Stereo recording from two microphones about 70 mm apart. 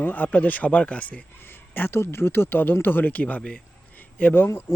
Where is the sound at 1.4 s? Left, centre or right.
Left.